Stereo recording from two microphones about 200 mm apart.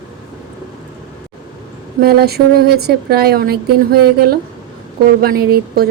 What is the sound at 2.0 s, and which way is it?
Speech, 50° right (ahead or behind).